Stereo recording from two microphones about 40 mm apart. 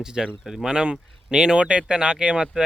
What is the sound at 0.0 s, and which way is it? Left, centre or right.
Speech, centre.